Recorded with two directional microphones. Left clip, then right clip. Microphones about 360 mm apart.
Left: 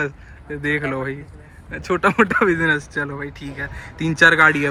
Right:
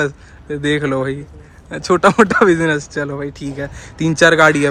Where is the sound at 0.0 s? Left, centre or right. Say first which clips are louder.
Right 5 dB; centre.